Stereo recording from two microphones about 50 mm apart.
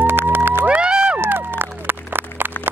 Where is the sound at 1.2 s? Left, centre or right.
Right.